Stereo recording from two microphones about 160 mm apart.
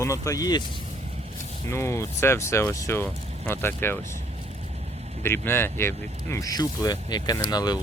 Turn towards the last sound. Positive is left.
turn(degrees=25)  # may be behind; listen again after turning